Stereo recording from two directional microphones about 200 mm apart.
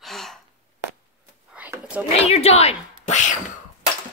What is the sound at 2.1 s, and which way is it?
Speech, 30° left (ahead or behind).